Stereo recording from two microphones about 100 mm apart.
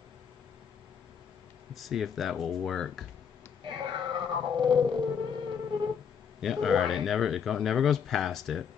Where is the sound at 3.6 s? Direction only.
55° right (ahead or behind).